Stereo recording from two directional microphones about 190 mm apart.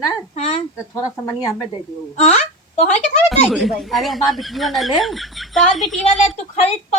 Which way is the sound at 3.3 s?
Centre (ahead or behind).